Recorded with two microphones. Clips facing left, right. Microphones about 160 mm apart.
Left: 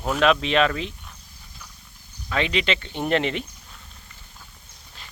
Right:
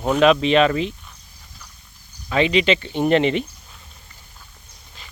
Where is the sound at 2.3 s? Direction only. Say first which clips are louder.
Right 6 dB; 5° right (ahead or behind).